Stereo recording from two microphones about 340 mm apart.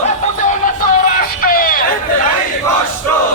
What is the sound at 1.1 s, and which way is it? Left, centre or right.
Music, left.